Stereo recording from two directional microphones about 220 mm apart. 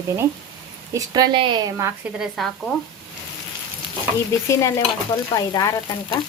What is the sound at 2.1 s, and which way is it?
Speech, centre (ahead or behind).